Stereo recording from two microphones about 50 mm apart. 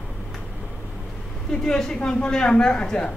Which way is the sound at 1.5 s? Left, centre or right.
Centre.